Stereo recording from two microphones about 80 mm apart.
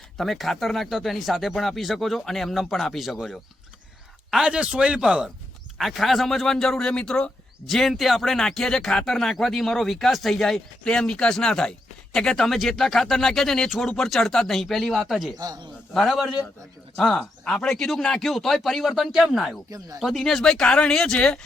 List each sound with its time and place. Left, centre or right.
0.2 s a man's voice: centre
15.4 s a man's voice: right
15.9 s speech: centre
17.2 s speech: centre